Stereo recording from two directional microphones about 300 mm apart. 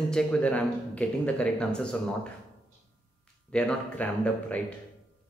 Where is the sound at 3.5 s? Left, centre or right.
Centre.